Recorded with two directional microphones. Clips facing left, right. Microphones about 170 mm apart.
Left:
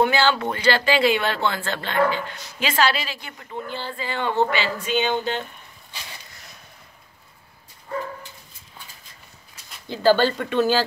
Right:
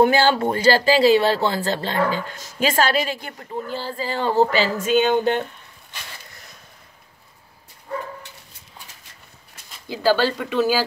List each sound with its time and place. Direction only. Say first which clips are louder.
0.0 s speech: right 4 dB; 45° right (ahead or behind)
9.8 s speech: left 1 dB; 5° right (ahead or behind)